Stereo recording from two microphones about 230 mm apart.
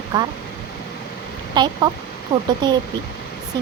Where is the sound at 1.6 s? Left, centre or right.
Centre.